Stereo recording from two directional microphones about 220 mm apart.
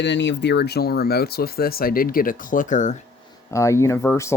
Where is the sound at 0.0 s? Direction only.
55° left (ahead or behind); by 2.9 s 35° left (ahead or behind).